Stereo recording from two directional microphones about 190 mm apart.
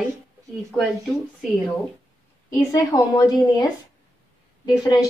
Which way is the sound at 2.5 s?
15° left (ahead or behind).